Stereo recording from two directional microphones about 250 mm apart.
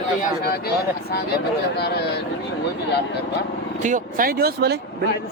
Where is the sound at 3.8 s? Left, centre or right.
Right.